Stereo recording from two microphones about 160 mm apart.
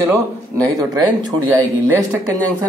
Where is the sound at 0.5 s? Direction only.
25° right (ahead or behind).